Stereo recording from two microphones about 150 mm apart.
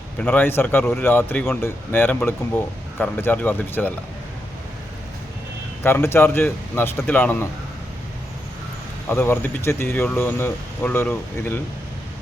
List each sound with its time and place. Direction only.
0.2 s a man's voice: 15° left (ahead or behind)
5.8 s a man's voice: 15° left (ahead or behind)
9.0 s a man's voice: 15° left (ahead or behind)